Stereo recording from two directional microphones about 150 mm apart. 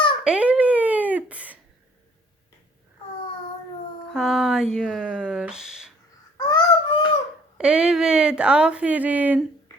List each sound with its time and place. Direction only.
0.3 s a sound: 5° right (ahead or behind)
4.1 s a sound: centre (ahead or behind)
4.7 s speech: 5° left (ahead or behind)
5.0 s speech: 5° right (ahead or behind)
6.3 s honk: 25° left (ahead or behind)
7.6 s speech: 5° right (ahead or behind)